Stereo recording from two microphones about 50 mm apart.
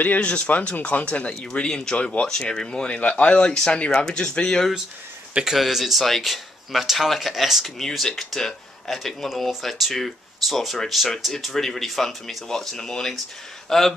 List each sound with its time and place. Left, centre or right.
0.0 s speech: left
3.0 s speech: left
5.4 s speech: centre